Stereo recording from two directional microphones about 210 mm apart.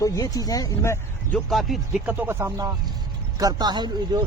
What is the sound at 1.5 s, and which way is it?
Speech, centre (ahead or behind).